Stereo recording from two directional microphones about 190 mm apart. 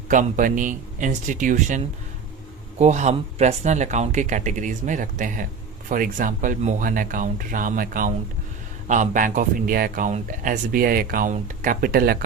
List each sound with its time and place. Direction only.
0.1 s speech: 45° right (ahead or behind)